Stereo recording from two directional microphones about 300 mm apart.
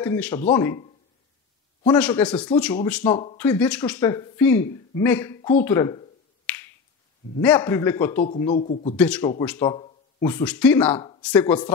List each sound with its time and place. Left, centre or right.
0.0 s speech: centre
2.0 s speech: centre
2.2 s speech: centre
2.5 s speech: centre
5.6 s finger snapping: centre
7.3 s speech: centre
8.2 s speech: centre
8.9 s speech: centre